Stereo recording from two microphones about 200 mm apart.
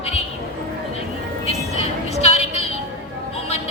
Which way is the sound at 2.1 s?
30° left (ahead or behind).